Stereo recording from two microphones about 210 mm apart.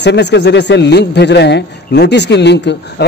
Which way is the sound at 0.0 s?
55° left (ahead or behind).